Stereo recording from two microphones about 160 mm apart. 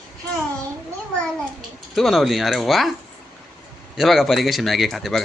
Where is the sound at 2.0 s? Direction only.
Centre (ahead or behind).